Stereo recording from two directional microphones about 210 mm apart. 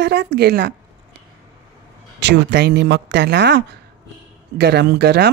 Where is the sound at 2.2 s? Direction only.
55° right (ahead or behind).